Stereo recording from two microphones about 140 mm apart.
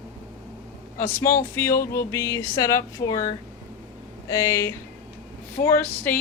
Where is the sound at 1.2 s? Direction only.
20° left (ahead or behind).